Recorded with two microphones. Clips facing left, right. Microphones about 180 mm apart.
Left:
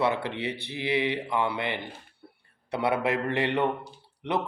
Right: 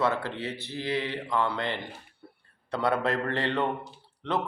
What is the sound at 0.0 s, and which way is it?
A man's voice, 15° left (ahead or behind).